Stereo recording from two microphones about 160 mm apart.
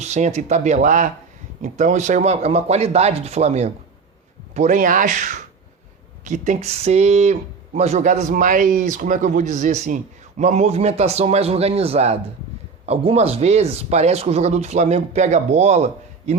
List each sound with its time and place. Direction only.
0.0 s speech: 45° right (ahead or behind)